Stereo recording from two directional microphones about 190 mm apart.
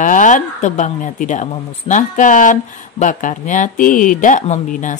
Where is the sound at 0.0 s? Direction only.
40° left (ahead or behind).